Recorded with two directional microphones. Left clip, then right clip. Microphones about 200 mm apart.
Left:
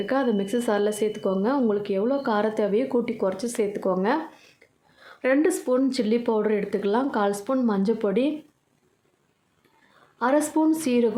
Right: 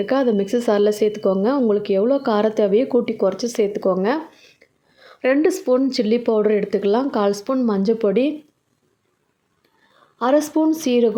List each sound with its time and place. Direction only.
0.0 s speech: 25° right (ahead or behind)
10.2 s speech: 20° right (ahead or behind)